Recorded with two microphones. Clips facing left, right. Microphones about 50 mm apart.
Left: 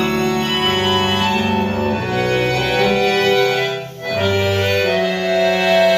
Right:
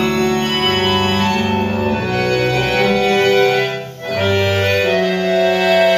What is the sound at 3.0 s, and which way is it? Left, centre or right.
Organ, right.